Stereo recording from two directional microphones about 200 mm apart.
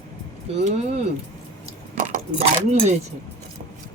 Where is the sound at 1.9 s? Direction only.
35° right (ahead or behind).